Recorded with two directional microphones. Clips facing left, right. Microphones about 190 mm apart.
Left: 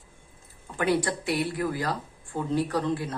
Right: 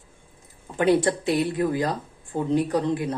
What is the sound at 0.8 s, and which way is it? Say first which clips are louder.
Speech: right 6 dB; 25° right (ahead or behind).